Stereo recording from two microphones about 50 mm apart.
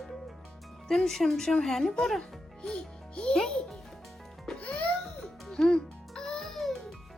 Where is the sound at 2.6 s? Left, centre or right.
Centre.